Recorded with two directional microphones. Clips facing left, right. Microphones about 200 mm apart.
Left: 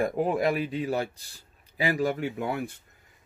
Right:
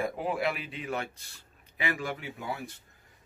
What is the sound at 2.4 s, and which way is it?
Speech, 60° left (ahead or behind).